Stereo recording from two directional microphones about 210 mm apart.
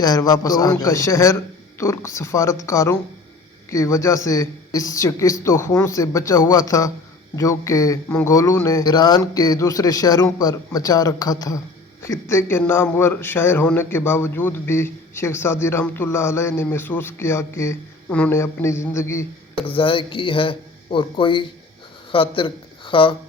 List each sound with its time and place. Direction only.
0.0 s a man's voice: 20° left (ahead or behind)
19.6 s speech: 25° left (ahead or behind)